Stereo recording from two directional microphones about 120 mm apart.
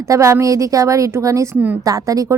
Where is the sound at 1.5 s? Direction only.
15° right (ahead or behind).